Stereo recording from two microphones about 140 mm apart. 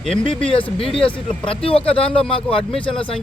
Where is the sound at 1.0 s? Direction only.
40° left (ahead or behind).